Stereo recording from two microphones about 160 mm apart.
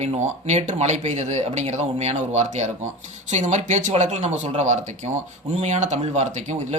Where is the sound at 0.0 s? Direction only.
45° right (ahead or behind).